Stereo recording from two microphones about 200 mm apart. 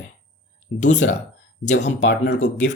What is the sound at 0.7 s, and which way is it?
Speech, 60° left (ahead or behind).